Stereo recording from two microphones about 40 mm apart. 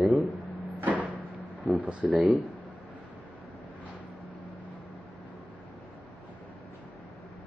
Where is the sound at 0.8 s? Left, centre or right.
Right.